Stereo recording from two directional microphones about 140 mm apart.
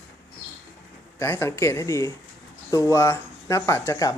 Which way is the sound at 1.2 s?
20° left (ahead or behind).